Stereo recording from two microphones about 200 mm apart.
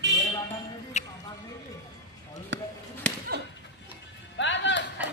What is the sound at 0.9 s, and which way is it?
Music, 35° left (ahead or behind).